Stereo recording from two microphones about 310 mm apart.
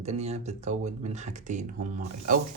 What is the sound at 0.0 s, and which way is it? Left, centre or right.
Speech, right.